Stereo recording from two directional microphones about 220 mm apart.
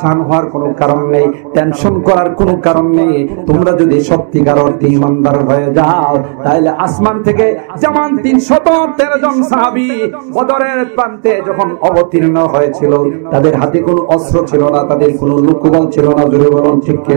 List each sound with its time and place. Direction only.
0.0 s a man's voice: 20° right (ahead or behind)